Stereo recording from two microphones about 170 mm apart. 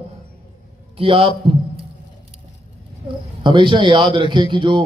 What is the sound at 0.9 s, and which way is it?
Speech, 30° right (ahead or behind).